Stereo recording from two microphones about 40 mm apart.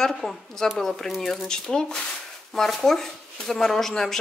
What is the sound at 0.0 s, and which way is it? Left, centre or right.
Speech, centre.